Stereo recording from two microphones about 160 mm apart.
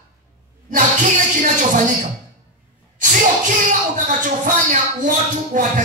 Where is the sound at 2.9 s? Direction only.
55° right (ahead or behind).